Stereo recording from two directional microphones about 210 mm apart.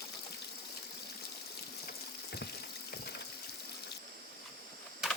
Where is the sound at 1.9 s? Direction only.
50° left (ahead or behind).